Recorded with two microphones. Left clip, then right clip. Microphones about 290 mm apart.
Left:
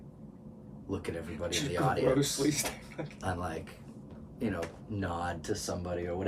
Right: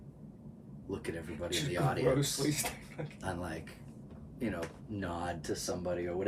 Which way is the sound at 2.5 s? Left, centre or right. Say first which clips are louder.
Left 3 dB; centre.